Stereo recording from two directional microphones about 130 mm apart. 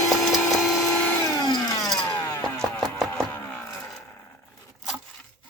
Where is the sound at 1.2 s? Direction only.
30° left (ahead or behind).